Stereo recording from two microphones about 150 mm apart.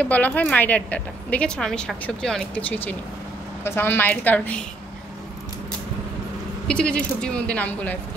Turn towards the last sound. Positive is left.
turn(degrees=10)  # may be behind; listen again after turning